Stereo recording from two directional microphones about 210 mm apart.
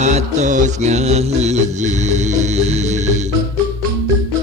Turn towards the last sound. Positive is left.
turn(degrees=-35)  # may be behind; listen again after turning